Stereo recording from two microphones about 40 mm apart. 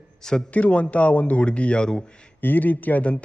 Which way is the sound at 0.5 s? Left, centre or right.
Left.